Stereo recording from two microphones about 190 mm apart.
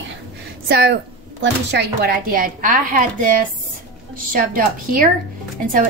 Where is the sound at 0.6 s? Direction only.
55° right (ahead or behind).